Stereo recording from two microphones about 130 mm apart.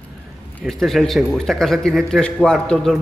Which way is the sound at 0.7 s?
Centre (ahead or behind).